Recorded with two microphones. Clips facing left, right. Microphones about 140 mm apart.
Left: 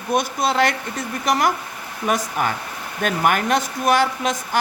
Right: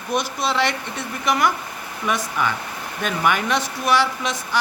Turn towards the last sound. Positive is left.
turn(degrees=45)  # may be behind; listen again after turning